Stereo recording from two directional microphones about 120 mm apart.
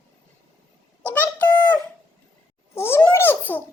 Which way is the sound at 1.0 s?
10° left (ahead or behind).